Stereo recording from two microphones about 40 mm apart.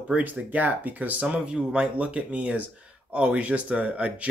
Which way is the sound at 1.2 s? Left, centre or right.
Right.